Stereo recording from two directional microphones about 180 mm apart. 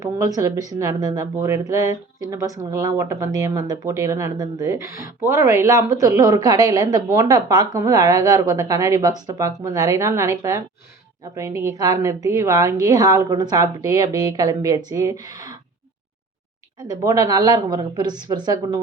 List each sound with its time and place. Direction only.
0.0 s speech: 20° right (ahead or behind)
16.9 s speech: 20° right (ahead or behind)